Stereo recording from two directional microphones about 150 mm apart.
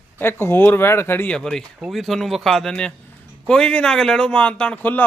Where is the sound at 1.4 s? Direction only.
5° left (ahead or behind).